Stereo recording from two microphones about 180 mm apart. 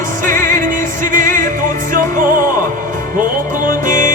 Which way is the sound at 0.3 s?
45° right (ahead or behind).